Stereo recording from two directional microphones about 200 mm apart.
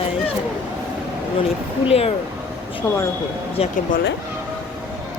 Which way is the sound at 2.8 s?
10° left (ahead or behind).